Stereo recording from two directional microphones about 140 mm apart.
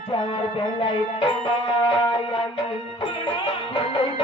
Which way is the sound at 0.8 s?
35° left (ahead or behind).